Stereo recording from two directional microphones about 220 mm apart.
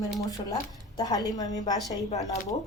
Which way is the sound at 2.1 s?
30° left (ahead or behind).